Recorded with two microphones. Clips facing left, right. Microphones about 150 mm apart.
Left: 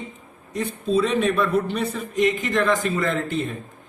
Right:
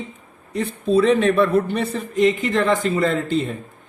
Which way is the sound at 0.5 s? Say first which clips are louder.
Right 4 dB; 60° right (ahead or behind).